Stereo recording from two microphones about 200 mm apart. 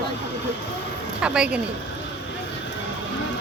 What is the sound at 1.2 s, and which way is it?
Speech, 5° right (ahead or behind).